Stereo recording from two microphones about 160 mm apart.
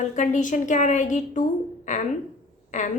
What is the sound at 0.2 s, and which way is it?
A woman's voice, 50° left (ahead or behind).